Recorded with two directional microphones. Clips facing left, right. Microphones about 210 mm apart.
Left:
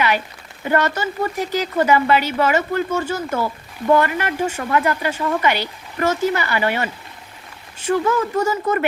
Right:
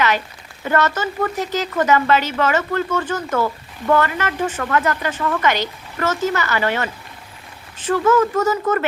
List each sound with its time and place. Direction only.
0.7 s speech: 15° left (ahead or behind)